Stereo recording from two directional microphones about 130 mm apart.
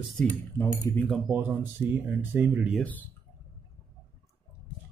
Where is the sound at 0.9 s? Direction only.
25° left (ahead or behind).